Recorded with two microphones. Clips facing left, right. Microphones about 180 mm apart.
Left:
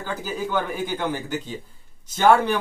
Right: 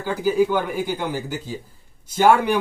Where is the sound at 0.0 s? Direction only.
10° right (ahead or behind).